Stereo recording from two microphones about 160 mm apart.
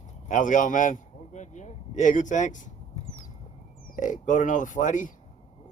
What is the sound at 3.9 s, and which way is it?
Speech, 55° left (ahead or behind).